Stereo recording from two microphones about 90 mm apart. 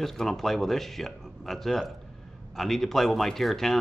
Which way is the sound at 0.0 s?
5° left (ahead or behind).